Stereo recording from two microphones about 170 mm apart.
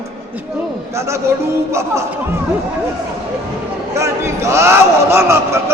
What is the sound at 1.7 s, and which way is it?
Speech, 15° right (ahead or behind).